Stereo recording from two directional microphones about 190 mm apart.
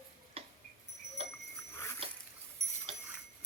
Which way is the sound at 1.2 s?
30° right (ahead or behind).